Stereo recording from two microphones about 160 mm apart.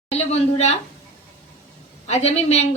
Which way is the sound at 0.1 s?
40° left (ahead or behind).